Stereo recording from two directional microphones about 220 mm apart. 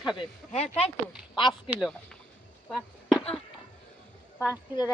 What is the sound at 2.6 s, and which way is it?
Chop, centre (ahead or behind).